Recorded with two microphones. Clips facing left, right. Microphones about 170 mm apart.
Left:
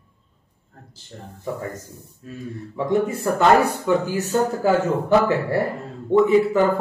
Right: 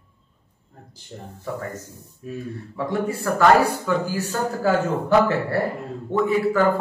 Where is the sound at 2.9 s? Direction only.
20° left (ahead or behind).